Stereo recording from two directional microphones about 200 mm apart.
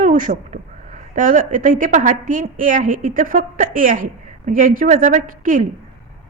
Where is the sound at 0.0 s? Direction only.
40° right (ahead or behind).